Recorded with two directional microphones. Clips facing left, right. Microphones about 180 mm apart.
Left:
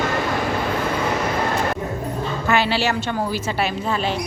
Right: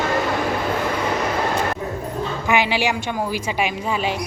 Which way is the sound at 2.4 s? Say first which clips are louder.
Even; 15° right (ahead or behind).